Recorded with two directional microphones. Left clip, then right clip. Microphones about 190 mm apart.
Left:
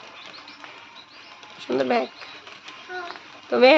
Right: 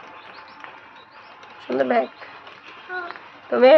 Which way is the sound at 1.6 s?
25° left (ahead or behind).